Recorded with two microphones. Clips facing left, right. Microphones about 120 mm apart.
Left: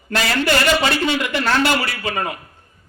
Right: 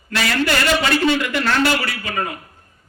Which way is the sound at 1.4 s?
35° left (ahead or behind).